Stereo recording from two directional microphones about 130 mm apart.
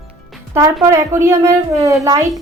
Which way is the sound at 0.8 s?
20° right (ahead or behind).